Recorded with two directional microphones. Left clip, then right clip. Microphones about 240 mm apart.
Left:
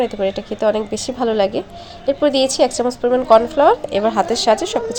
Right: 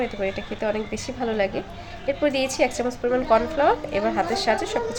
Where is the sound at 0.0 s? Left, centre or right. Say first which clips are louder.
Left 7 dB; left.